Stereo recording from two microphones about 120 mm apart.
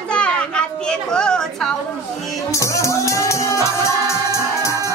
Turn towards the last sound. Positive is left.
turn(degrees=25)  # may be behind; listen again after turning